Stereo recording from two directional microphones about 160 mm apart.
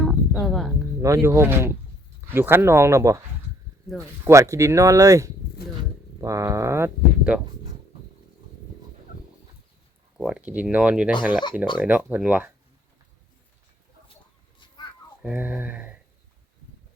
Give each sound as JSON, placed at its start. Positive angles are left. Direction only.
{"t": 0.0, "sound": "music", "side_deg": 5}
{"t": 1.0, "sound": "speech", "side_deg": -20}
{"t": 10.2, "sound": "speech", "side_deg": -5}
{"t": 15.2, "sound": "speech", "side_deg": -10}